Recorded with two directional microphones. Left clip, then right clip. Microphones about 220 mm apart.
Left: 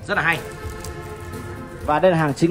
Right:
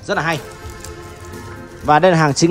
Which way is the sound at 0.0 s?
15° right (ahead or behind).